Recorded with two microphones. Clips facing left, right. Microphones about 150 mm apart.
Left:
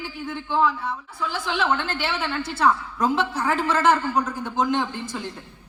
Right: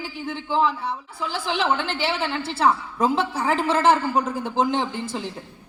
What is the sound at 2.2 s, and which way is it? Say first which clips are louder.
A man's voice: left 1 dB; 25° right (ahead or behind).